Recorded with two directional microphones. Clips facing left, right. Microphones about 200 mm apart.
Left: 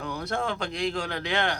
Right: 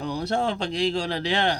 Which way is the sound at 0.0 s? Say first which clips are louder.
Right 5 dB; 30° right (ahead or behind).